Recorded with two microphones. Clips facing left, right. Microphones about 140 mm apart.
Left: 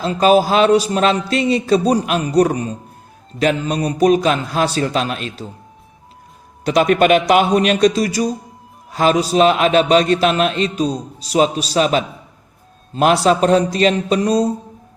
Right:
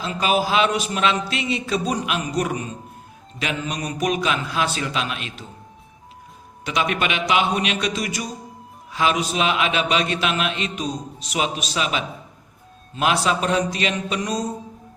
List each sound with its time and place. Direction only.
0.0 s a man's voice: 40° left (ahead or behind)
6.7 s a man's voice: 45° left (ahead or behind)